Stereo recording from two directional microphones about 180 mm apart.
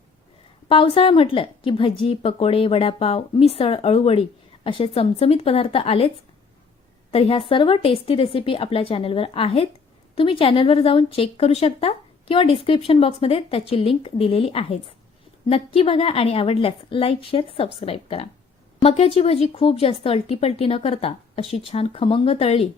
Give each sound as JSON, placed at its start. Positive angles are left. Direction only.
{"t": 0.7, "sound": "speech", "side_deg": 30}
{"t": 7.1, "sound": "speech", "side_deg": 35}